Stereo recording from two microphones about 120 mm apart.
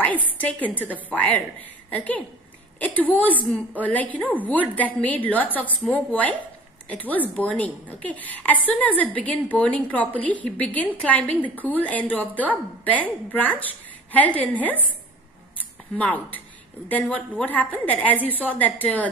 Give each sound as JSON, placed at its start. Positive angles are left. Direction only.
{"t": 0.0, "sound": "a woman's voice", "side_deg": 15}
{"t": 16.0, "sound": "a woman's voice", "side_deg": 15}